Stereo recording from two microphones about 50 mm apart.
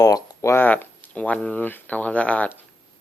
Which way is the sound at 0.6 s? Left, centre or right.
Left.